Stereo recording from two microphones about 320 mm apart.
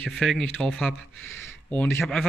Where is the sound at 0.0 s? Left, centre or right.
Centre.